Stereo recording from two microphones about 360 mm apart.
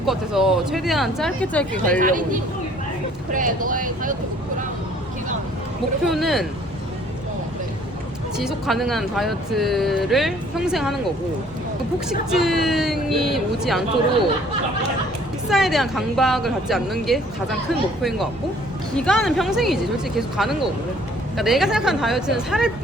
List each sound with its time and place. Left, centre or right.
0.0 s a woman's voice: centre
2.0 s speech: right
6.1 s a woman's voice: centre
8.4 s a woman's voice: centre
12.3 s a woman's voice: centre
15.4 s a woman's voice: centre